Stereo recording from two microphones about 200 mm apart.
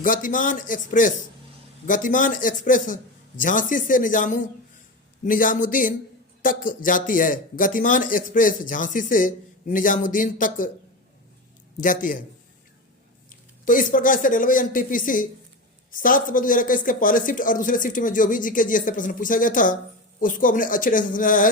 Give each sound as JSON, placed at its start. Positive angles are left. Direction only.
{"t": 0.0, "sound": "speech", "side_deg": 40}
{"t": 11.8, "sound": "speech", "side_deg": 40}
{"t": 13.7, "sound": "speech", "side_deg": 45}